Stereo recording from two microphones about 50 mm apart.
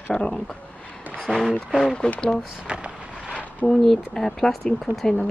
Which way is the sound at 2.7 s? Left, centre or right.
Right.